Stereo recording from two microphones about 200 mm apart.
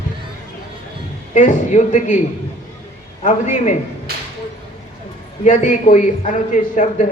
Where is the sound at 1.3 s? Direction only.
35° left (ahead or behind).